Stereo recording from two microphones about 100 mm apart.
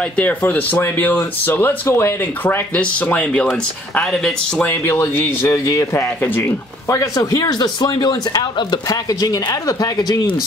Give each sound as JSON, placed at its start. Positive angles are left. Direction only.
{"t": 0.1, "sound": "speech", "side_deg": 15}
{"t": 4.6, "sound": "speech", "side_deg": 25}